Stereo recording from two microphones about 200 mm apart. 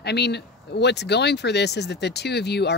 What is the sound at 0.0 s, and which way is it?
Speech, 55° left (ahead or behind).